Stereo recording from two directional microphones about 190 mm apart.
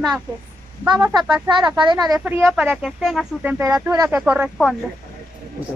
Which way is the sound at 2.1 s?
5° right (ahead or behind).